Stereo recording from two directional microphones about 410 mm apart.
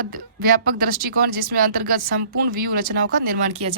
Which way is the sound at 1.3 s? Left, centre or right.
Right.